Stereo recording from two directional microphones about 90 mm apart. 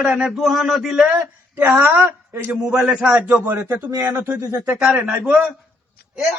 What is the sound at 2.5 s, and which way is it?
A man's voice, 5° right (ahead or behind).